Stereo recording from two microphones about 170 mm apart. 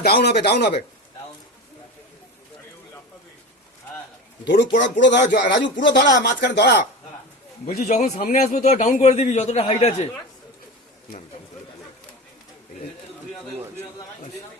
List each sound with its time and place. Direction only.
0.0 s a man's voice: 70° left (ahead or behind)
4.4 s speech: 90° left
7.8 s a man's voice: 45° left (ahead or behind)